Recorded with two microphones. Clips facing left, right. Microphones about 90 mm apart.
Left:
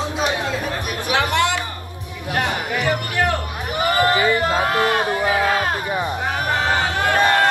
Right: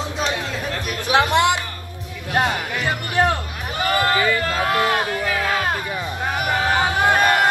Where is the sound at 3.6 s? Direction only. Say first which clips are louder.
Left 2 dB; 20° left (ahead or behind).